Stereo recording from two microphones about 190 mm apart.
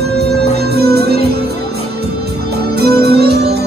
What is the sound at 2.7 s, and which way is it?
Music, 60° right (ahead or behind).